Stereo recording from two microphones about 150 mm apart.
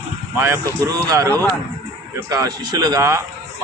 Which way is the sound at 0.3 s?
20° right (ahead or behind).